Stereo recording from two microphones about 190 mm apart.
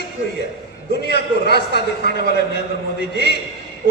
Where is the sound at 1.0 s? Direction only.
60° left (ahead or behind).